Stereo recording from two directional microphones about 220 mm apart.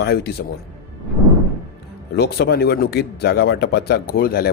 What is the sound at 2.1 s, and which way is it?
Speech, 45° left (ahead or behind).